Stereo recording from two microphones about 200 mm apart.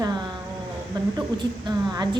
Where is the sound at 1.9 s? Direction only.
20° right (ahead or behind).